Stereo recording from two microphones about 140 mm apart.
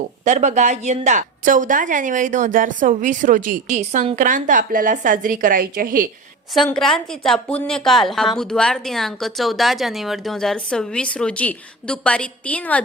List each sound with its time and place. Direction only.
0.3 s a woman's voice: 55° right (ahead or behind); by 6.1 s 90° right
6.7 s a woman's voice: 5° left (ahead or behind)